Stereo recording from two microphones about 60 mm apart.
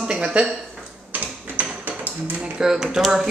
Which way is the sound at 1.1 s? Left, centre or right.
Right.